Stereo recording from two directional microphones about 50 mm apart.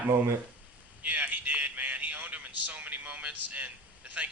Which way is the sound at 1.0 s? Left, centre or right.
Right.